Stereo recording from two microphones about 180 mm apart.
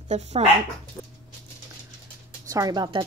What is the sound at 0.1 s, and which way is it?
Speech, 40° right (ahead or behind).